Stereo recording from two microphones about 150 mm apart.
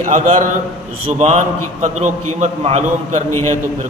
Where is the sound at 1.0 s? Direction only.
50° right (ahead or behind).